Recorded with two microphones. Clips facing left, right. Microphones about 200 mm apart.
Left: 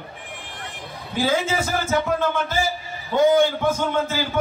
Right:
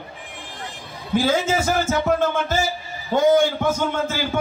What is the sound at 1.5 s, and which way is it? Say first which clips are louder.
A man's voice: right 2 dB; 45° right (ahead or behind).